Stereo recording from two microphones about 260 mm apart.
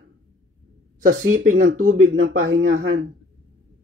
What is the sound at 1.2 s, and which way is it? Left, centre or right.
Speech, right.